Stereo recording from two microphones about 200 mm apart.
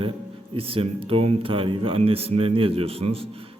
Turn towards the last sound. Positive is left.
turn(degrees=-30)  # may be behind; listen again after turning